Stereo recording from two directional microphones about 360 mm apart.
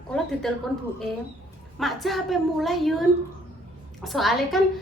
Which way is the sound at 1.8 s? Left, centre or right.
Centre.